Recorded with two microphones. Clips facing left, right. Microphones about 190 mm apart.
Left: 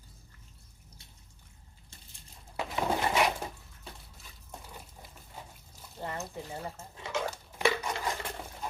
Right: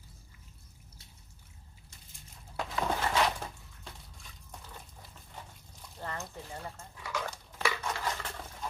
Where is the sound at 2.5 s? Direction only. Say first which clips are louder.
Left 2 dB; 10° left (ahead or behind).